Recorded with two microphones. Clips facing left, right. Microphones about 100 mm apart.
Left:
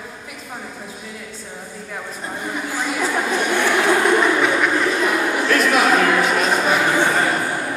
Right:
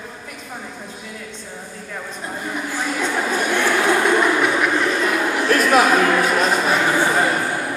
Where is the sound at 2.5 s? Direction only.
5° left (ahead or behind).